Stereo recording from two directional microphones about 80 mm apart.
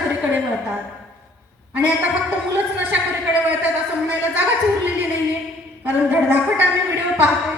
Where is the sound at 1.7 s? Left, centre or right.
Right.